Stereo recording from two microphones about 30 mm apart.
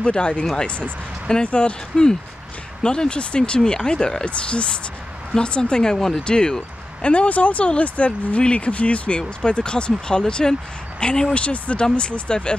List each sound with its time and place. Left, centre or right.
0.0 s speech: left
2.8 s speech: left
6.2 s speech: left
7.0 s speech: left
9.4 s speech: left
11.3 s speech: left
11.9 s speech: left